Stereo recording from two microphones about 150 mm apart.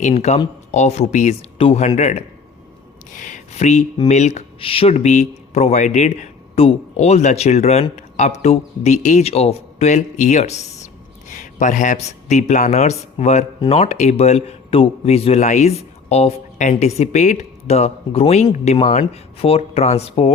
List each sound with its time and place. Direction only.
0.0 s a man's voice: 45° left (ahead or behind)
3.1 s a man's voice: 55° left (ahead or behind); by 20.3 s 40° left (ahead or behind)